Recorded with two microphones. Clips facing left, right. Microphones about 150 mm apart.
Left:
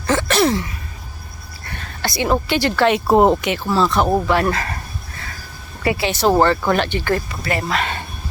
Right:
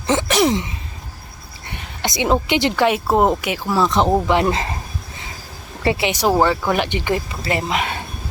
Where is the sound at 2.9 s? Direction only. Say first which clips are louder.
Left 5 dB; centre (ahead or behind); by 4.7 s 20° right (ahead or behind).